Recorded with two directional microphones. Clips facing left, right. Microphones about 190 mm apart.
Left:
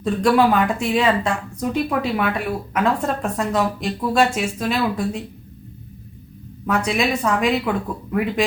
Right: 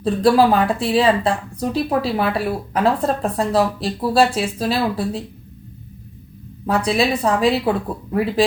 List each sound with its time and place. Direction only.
0.0 s a woman's voice: 35° right (ahead or behind)
6.7 s a woman's voice: 35° right (ahead or behind)